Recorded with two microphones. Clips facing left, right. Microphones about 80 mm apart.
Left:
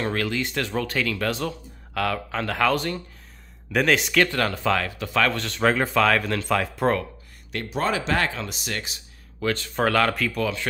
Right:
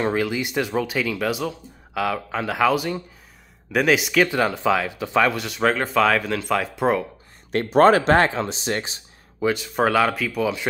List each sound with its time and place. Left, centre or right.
0.0 s speech: centre
7.5 s speech: right
8.2 s speech: right
9.4 s speech: centre